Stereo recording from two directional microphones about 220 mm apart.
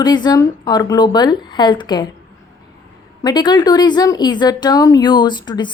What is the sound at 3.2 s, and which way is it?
Speech, 20° left (ahead or behind).